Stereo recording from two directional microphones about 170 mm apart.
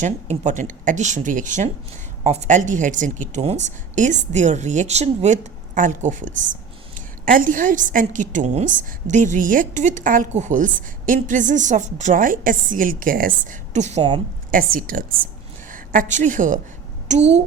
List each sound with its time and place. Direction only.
0.0 s a woman's voice: 45° right (ahead or behind)
14.5 s a woman's voice: 55° right (ahead or behind)
17.1 s a woman's voice: 40° right (ahead or behind)